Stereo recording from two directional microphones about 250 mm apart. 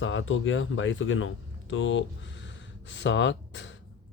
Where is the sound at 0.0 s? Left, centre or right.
Left.